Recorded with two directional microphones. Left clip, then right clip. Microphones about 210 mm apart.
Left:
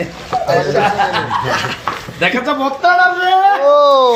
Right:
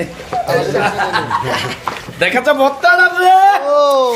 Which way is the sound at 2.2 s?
50° right (ahead or behind).